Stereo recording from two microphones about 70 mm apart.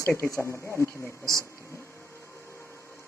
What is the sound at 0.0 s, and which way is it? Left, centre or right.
Speech, left.